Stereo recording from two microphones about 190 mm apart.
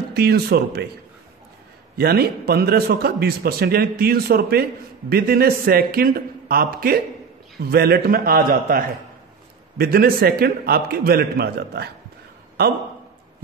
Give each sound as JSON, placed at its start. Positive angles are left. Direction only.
{"t": 0.1, "sound": "a man's voice", "side_deg": -55}
{"t": 2.0, "sound": "a man's voice", "side_deg": -55}